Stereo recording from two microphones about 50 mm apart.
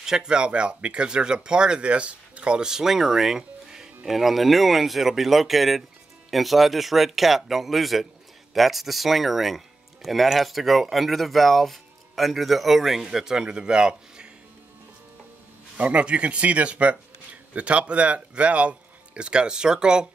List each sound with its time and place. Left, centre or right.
0.0 s speech: centre
15.8 s speech: right